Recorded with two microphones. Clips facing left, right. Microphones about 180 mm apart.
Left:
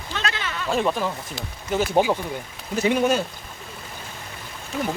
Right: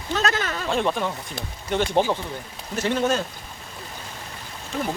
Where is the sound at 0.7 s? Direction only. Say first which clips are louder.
Left 2 dB; centre (ahead or behind).